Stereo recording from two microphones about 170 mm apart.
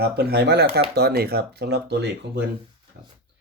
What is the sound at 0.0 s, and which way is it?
Speech, 70° right (ahead or behind).